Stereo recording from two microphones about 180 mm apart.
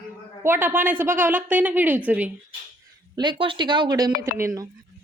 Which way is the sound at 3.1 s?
25° right (ahead or behind).